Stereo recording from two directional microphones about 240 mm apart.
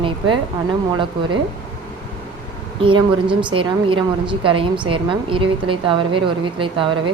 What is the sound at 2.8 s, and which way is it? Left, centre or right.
A woman's voice, right.